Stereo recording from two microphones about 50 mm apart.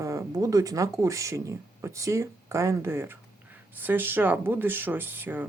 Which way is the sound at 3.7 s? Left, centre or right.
Right.